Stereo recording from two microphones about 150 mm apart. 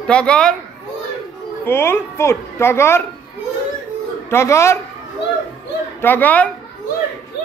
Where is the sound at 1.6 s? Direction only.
15° left (ahead or behind).